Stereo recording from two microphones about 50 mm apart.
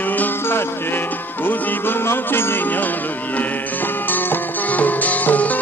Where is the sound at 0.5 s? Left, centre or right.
Left.